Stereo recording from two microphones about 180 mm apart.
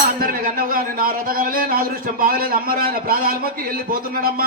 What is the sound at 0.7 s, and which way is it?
A man's voice, 50° right (ahead or behind).